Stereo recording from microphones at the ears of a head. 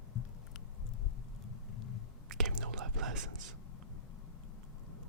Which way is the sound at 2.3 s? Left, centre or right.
Right.